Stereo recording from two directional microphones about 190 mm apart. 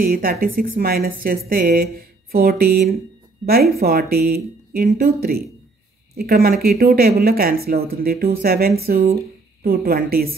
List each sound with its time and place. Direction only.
0.0 s a woman's voice: 50° right (ahead or behind)